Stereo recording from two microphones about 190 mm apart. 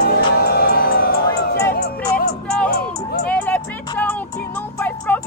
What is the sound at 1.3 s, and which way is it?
Music, 15° left (ahead or behind).